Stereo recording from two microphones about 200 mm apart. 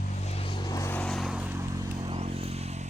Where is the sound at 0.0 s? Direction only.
35° left (ahead or behind).